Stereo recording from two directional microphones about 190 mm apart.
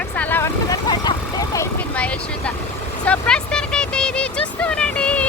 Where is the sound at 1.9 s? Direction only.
5° left (ahead or behind).